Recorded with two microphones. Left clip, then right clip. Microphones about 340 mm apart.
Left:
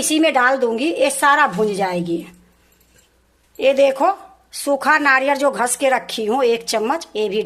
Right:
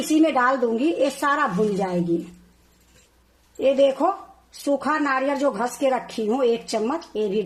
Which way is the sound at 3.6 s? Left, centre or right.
Left.